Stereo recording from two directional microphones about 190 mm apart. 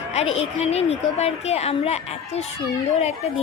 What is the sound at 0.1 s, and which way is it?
A woman's voice, 35° left (ahead or behind).